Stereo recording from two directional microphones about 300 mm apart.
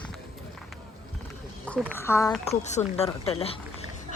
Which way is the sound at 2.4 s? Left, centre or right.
Left.